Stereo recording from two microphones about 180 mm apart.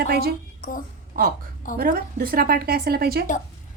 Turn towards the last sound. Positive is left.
turn(degrees=-60)  # may be behind; listen again after turning